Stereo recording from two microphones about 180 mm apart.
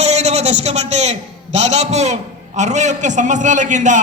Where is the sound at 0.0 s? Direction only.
40° right (ahead or behind).